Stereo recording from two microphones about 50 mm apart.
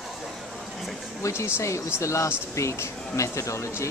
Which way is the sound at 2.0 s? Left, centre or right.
Left.